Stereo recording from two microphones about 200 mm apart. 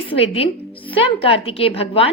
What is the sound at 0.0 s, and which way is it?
A woman's voice, 25° left (ahead or behind).